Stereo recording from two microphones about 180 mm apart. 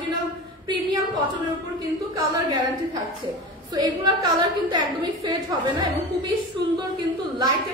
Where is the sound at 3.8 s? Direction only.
20° right (ahead or behind).